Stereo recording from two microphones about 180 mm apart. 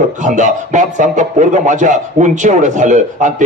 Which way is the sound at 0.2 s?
45° right (ahead or behind).